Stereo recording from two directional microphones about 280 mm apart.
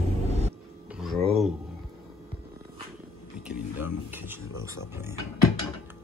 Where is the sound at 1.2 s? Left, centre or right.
Right.